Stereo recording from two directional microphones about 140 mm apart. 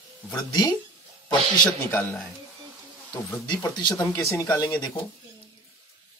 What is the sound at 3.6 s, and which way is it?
Speech, 30° left (ahead or behind).